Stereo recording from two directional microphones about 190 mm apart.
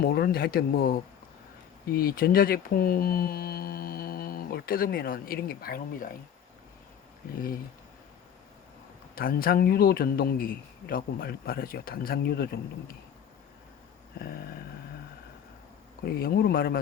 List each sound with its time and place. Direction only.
0.0 s speech: 55° left (ahead or behind)
9.1 s speech: 50° left (ahead or behind)
16.1 s speech: 50° left (ahead or behind)